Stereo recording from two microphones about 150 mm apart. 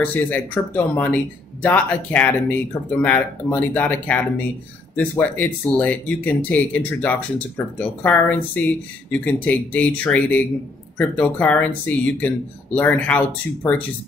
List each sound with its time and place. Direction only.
0.0 s speech: 10° left (ahead or behind)